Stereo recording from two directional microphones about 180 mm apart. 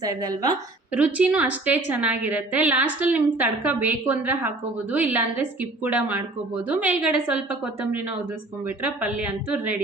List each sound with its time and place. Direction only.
0.0 s a woman's voice: 20° right (ahead or behind)
0.9 s a woman's voice: 5° right (ahead or behind)
8.6 s a woman's voice: 10° right (ahead or behind)